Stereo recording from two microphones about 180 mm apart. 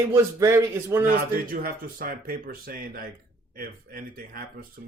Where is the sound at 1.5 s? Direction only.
55° right (ahead or behind).